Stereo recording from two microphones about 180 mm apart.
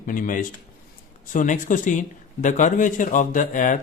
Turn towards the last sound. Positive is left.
turn(degrees=45)  # may be behind; listen again after turning